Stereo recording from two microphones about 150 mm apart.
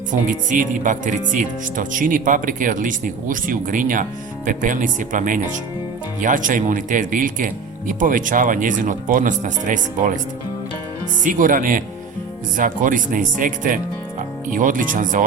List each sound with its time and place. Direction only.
0.1 s speech: 60° right (ahead or behind)
11.2 s speech: 65° right (ahead or behind)